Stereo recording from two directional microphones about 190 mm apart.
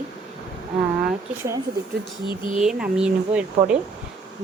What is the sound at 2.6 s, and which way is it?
Speech, 5° right (ahead or behind).